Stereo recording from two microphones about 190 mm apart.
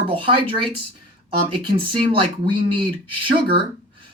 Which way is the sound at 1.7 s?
30° right (ahead or behind).